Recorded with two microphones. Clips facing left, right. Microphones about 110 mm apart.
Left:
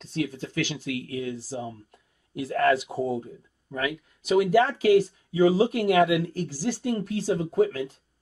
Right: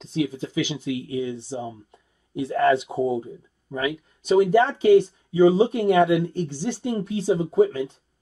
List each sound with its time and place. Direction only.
0.0 s speech: 5° right (ahead or behind)
4.2 s speech: 5° left (ahead or behind)